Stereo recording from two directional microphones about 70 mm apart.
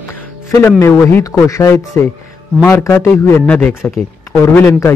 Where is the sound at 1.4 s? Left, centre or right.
Left.